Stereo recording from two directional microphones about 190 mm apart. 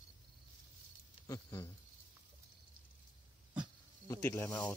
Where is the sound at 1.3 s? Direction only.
15° left (ahead or behind).